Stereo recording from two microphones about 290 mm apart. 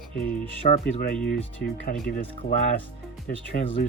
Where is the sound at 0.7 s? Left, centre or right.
Left.